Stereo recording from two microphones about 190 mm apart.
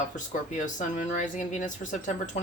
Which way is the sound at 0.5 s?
40° left (ahead or behind).